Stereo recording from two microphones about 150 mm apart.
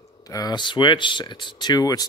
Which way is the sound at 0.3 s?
25° left (ahead or behind).